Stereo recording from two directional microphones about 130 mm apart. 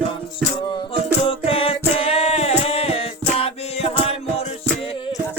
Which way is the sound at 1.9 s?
45° left (ahead or behind).